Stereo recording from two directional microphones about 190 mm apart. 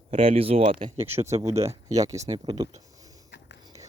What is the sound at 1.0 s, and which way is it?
Speech, 10° right (ahead or behind).